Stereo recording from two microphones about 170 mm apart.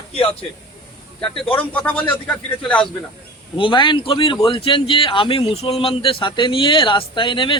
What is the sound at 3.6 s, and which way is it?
A man's voice, 30° left (ahead or behind).